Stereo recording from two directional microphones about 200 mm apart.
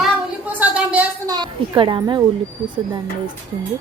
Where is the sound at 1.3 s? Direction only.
20° right (ahead or behind).